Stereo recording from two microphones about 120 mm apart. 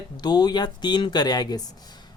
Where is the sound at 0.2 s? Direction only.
35° left (ahead or behind).